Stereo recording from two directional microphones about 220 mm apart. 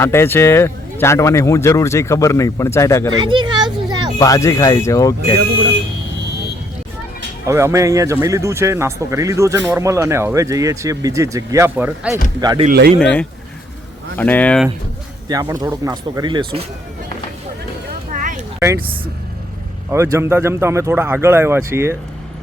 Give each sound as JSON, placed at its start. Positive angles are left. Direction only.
{"t": 0.0, "sound": "speech", "side_deg": 10}
{"t": 3.1, "sound": "a sound", "side_deg": -20}
{"t": 4.2, "sound": "speech", "side_deg": 15}
{"t": 7.4, "sound": "speech", "side_deg": -15}
{"t": 12.4, "sound": "speech", "side_deg": -20}
{"t": 12.6, "sound": "speech", "side_deg": -45}
{"t": 13.0, "sound": "speech", "side_deg": 5}
{"t": 15.3, "sound": "speech", "side_deg": -15}
{"t": 18.1, "sound": "a sound", "side_deg": -35}
{"t": 19.9, "sound": "speech", "side_deg": -10}